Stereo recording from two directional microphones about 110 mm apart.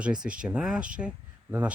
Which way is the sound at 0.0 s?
10° right (ahead or behind).